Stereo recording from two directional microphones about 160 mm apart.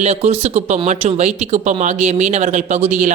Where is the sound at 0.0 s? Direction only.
40° right (ahead or behind).